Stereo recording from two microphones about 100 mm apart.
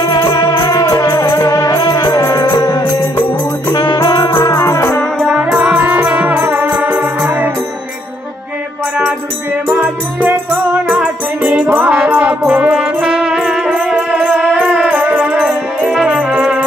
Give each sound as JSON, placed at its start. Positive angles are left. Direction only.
{"t": 0.0, "sound": "music", "side_deg": 40}
{"t": 4.6, "sound": "music", "side_deg": 30}
{"t": 5.2, "sound": "music", "side_deg": -10}
{"t": 9.7, "sound": "music", "side_deg": -20}